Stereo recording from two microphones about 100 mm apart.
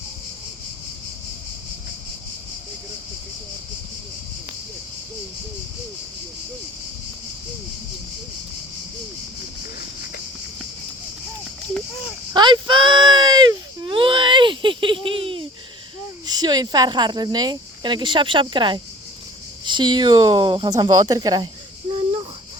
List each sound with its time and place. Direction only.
12.3 s a sound: 50° right (ahead or behind)
16.2 s speech: 45° right (ahead or behind)
20.7 s speech: 40° right (ahead or behind)